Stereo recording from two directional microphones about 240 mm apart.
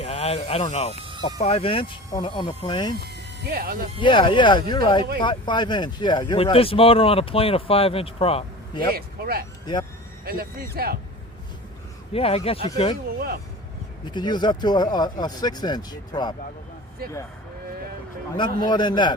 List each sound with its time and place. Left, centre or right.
0.0 s speech: left
3.5 s speech: right
4.0 s speech: centre
8.9 s speech: right
12.1 s speech: left
13.1 s speech: right
14.0 s speech: centre
18.3 s speech: centre